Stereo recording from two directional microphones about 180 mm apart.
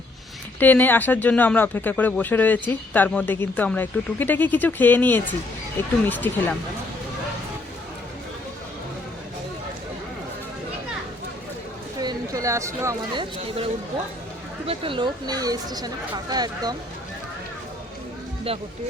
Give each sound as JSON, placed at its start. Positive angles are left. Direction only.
{"t": 0.6, "sound": "speech", "side_deg": 10}
{"t": 11.9, "sound": "speech", "side_deg": -20}
{"t": 14.7, "sound": "speech", "side_deg": -30}